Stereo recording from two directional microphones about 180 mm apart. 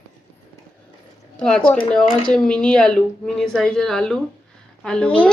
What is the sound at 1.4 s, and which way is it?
A woman's voice, 5° left (ahead or behind).